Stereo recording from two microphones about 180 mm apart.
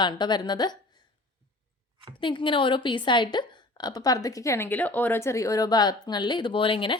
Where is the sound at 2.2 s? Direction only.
25° left (ahead or behind).